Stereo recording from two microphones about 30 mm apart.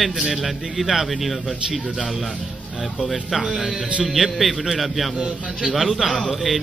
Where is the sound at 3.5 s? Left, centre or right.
Centre.